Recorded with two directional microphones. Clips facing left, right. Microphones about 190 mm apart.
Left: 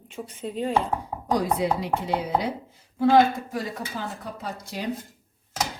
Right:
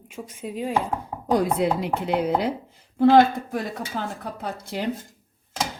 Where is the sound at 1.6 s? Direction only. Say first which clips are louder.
Right 2 dB; 60° right (ahead or behind).